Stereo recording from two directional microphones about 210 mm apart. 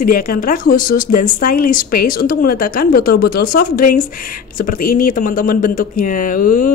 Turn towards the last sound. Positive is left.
turn(degrees=40)  # may be behind; listen again after turning